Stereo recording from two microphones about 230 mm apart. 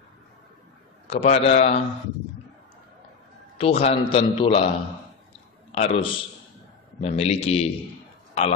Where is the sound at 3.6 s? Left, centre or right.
Left.